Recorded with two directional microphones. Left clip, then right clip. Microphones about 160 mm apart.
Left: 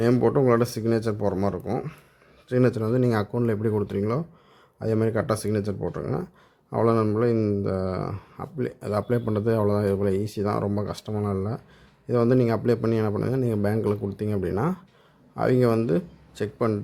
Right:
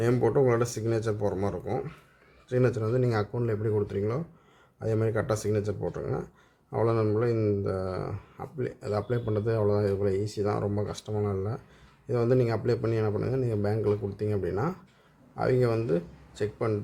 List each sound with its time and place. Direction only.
0.0 s speech: 40° left (ahead or behind)